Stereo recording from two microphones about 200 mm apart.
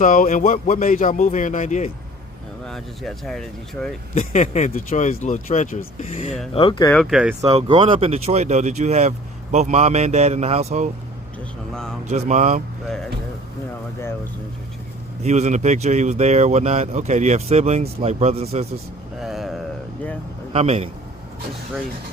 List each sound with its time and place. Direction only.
0.0 s speech: 40° left (ahead or behind)
2.6 s speech: centre (ahead or behind)
4.1 s speech: 30° left (ahead or behind)
6.9 s speech: centre (ahead or behind)
7.5 s speech: 25° right (ahead or behind)
11.7 s speech: 5° left (ahead or behind)
12.0 s speech: 35° right (ahead or behind)
15.2 s speech: 35° right (ahead or behind)
19.2 s a sound: centre (ahead or behind)
20.5 s speech: 30° right (ahead or behind)